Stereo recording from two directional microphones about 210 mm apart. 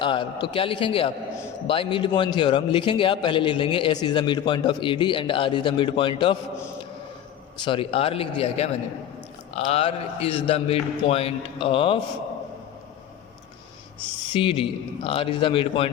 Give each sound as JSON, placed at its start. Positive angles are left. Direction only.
{"t": 0.0, "sound": "a man's voice", "side_deg": 20}
{"t": 7.6, "sound": "a man's voice", "side_deg": 25}
{"t": 14.3, "sound": "a man's voice", "side_deg": 25}